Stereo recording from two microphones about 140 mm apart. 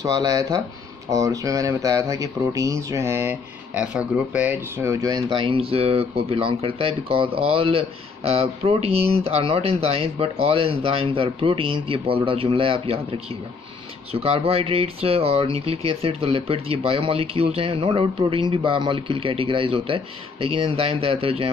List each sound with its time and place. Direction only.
0.0 s speech: 25° right (ahead or behind)
14.2 s speech: 45° right (ahead or behind)